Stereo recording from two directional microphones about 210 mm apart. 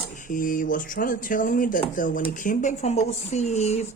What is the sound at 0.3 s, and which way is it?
Speech, 40° left (ahead or behind).